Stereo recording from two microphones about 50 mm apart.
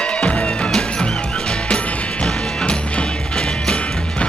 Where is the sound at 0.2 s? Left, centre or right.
Centre.